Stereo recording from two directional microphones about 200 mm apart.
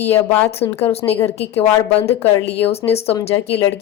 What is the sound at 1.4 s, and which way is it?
A woman's voice, 30° left (ahead or behind).